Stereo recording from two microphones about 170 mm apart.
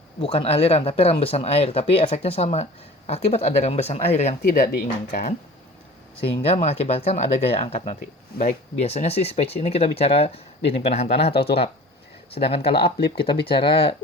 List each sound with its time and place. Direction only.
0.2 s speech: 35° left (ahead or behind)
4.5 s speech: 60° left (ahead or behind)
6.1 s speech: 30° left (ahead or behind)